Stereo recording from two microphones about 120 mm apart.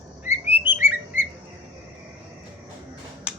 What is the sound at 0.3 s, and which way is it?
Bird, 15° right (ahead or behind).